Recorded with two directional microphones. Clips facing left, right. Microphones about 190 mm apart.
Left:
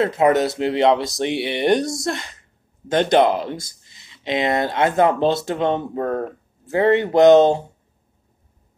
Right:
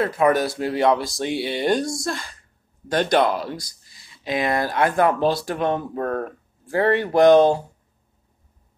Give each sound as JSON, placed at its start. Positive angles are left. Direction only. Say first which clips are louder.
{"t": 0.0, "sound": "speech", "louder": "left 2 dB", "side_deg": 25}